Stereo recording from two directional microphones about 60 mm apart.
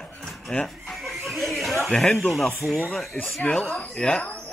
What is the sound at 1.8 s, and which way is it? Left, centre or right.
Speech, centre.